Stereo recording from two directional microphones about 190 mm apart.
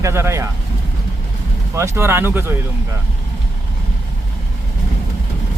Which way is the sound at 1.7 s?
15° right (ahead or behind).